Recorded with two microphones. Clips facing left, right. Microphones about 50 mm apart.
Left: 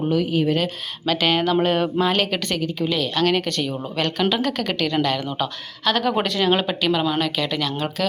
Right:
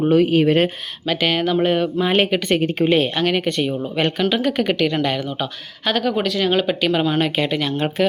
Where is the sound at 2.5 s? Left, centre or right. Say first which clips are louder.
Right 8 dB; right.